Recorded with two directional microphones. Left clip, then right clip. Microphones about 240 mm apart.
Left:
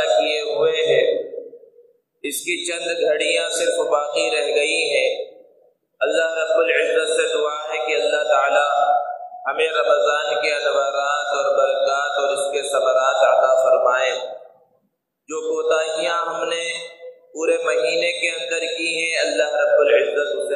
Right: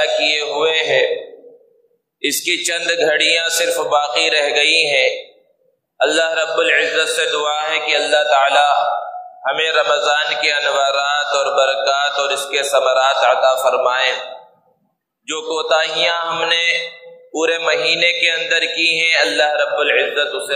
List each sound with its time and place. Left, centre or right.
0.0 s music: right
2.2 s music: right
9.4 s a man's voice: right
15.2 s music: right